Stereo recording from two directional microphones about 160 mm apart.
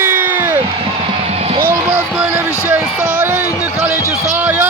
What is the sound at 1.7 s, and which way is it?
A man's voice, 15° right (ahead or behind).